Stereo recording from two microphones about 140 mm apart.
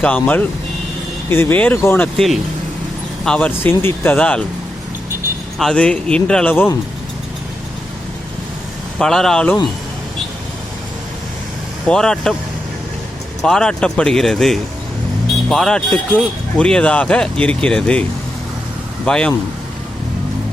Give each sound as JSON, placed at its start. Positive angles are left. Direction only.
{"t": 0.0, "sound": "speech", "side_deg": 10}
{"t": 2.1, "sound": "speech", "side_deg": 0}
{"t": 5.5, "sound": "speech", "side_deg": 5}
{"t": 9.0, "sound": "speech", "side_deg": 5}
{"t": 11.9, "sound": "speech", "side_deg": 5}
{"t": 13.4, "sound": "speech", "side_deg": 5}
{"t": 19.0, "sound": "speech", "side_deg": 5}